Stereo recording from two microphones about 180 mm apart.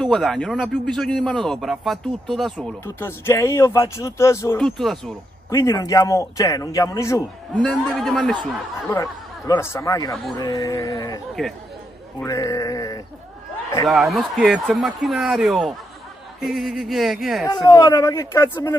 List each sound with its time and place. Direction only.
0.0 s speech: centre (ahead or behind)
2.8 s a man's voice: 15° left (ahead or behind)
4.6 s speech: centre (ahead or behind)
5.5 s a man's voice: 15° left (ahead or behind)
7.6 s speech: centre (ahead or behind)
8.9 s speech: 20° left (ahead or behind)
12.2 s speech: 20° left (ahead or behind)
13.8 s speech: centre (ahead or behind)
17.6 s a man's voice: 20° left (ahead or behind)